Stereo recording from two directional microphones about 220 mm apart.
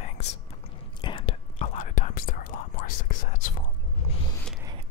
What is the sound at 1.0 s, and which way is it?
Whispering, 25° left (ahead or behind).